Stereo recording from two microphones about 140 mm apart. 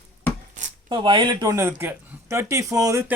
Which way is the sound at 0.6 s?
60° right (ahead or behind).